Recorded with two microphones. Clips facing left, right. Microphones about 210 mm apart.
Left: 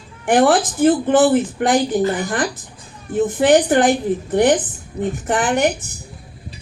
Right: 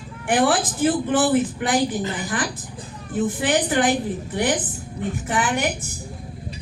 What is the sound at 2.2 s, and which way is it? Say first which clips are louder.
A woman's voice: left 5 dB; 45° left (ahead or behind).